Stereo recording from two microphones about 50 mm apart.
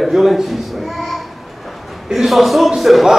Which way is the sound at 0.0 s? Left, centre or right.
Centre.